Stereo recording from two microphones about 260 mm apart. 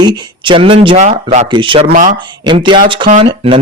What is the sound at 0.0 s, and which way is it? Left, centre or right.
Speech, centre.